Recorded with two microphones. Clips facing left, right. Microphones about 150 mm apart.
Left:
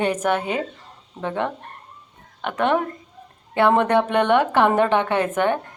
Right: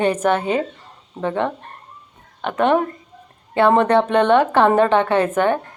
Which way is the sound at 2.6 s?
15° right (ahead or behind).